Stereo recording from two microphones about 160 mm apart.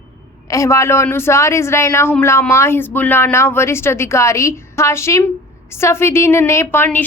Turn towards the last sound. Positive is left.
turn(degrees=10)  # may be behind; listen again after turning